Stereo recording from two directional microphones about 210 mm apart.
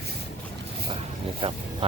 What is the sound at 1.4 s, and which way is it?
Vehicle, 25° right (ahead or behind).